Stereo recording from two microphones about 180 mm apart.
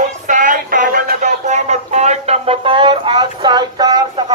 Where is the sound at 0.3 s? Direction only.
45° right (ahead or behind).